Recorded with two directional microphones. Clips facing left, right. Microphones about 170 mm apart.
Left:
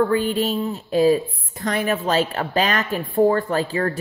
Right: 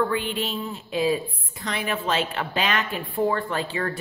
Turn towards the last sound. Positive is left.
turn(degrees=35)  # may be behind; listen again after turning